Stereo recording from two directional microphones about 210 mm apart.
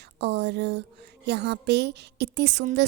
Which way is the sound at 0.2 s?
55° right (ahead or behind).